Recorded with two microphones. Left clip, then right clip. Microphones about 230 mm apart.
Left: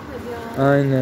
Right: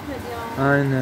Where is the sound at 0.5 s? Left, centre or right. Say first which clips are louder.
Left 3 dB; centre.